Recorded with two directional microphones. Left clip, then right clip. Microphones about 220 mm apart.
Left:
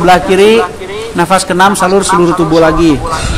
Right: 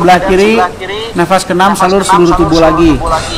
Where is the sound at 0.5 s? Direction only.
40° right (ahead or behind).